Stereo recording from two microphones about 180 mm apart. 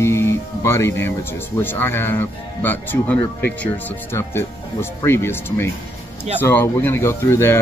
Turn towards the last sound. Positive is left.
turn(degrees=15)  # may be behind; listen again after turning